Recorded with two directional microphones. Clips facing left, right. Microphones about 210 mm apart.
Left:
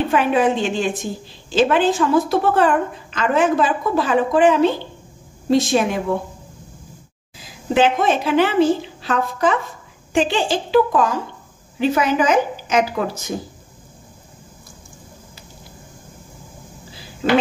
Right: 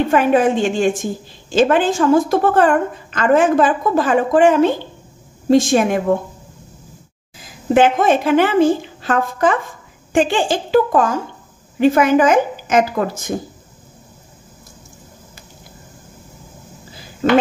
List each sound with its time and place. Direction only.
0.1 s a woman's voice: 45° right (ahead or behind)
7.3 s a woman's voice: 50° right (ahead or behind)